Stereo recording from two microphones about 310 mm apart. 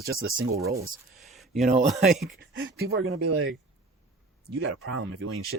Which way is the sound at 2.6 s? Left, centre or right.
Right.